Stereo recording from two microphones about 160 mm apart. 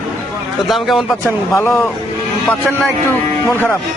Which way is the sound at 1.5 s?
15° left (ahead or behind).